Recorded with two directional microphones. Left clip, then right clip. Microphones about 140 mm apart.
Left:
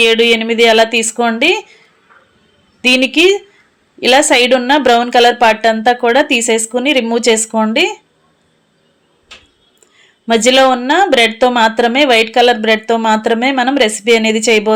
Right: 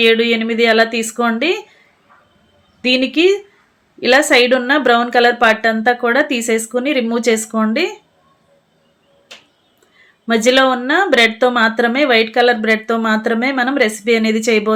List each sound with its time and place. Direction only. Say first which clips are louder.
0.0 s speech: left 3 dB; 25° left (ahead or behind)
2.8 s speech: left 4 dB; 20° left (ahead or behind)
10.2 s speech: left 3 dB; 20° left (ahead or behind)